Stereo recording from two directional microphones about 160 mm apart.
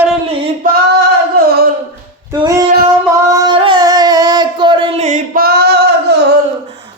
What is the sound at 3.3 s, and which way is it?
Singing, 20° right (ahead or behind).